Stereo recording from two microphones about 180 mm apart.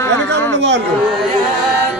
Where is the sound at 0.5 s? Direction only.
75° right (ahead or behind).